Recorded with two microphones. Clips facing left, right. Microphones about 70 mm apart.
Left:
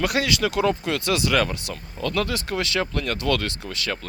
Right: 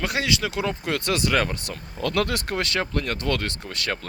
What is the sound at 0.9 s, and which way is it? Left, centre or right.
Speech, right.